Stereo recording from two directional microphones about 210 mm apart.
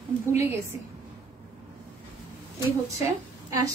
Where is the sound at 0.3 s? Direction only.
10° right (ahead or behind).